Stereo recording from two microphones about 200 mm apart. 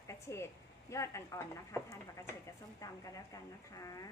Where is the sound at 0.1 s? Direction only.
15° left (ahead or behind).